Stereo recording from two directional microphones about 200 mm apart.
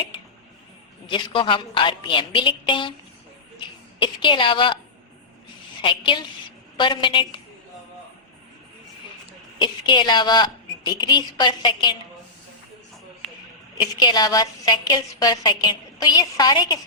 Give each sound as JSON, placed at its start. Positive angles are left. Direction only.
{"t": 1.0, "sound": "a woman's voice", "side_deg": 25}
{"t": 4.0, "sound": "a woman's voice", "side_deg": 25}
{"t": 5.8, "sound": "a woman's voice", "side_deg": 25}
{"t": 9.6, "sound": "a woman's voice", "side_deg": 25}
{"t": 13.7, "sound": "a woman's voice", "side_deg": 20}